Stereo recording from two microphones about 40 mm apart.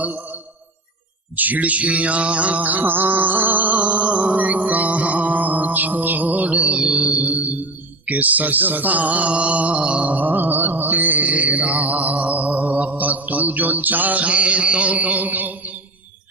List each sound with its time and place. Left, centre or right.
0.0 s a man's voice: right
1.4 s mantra: right
6.6 s mantra: right
7.1 s mantra: right
10.1 s mantra: right